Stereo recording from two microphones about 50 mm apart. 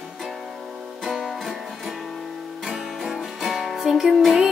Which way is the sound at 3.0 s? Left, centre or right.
Centre.